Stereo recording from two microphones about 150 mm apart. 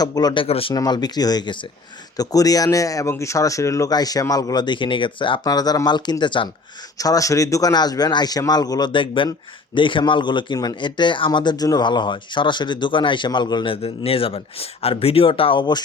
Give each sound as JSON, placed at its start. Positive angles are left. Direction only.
{"t": 0.0, "sound": "speech", "side_deg": 25}
{"t": 0.4, "sound": "a man's voice", "side_deg": 40}
{"t": 0.7, "sound": "a man's voice", "side_deg": 25}